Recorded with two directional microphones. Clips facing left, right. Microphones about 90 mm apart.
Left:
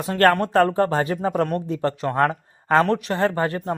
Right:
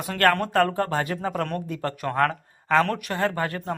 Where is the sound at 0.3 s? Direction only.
30° left (ahead or behind).